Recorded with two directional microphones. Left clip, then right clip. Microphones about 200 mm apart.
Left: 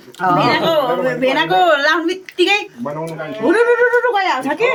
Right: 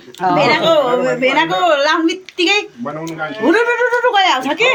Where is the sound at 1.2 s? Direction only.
40° right (ahead or behind).